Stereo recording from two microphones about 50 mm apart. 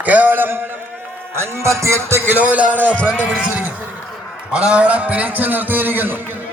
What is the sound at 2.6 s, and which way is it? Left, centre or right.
Speech, right.